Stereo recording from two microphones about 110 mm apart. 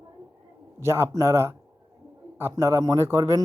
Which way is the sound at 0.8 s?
25° right (ahead or behind).